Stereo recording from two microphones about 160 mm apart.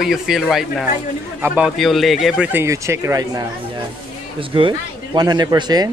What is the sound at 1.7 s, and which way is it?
Speech, centre (ahead or behind).